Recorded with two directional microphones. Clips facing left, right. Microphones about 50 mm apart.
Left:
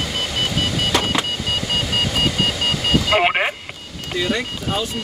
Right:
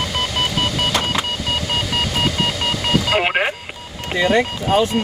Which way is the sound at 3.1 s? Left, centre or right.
Centre.